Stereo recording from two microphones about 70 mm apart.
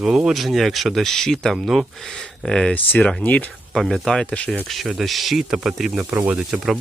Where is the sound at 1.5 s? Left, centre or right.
Centre.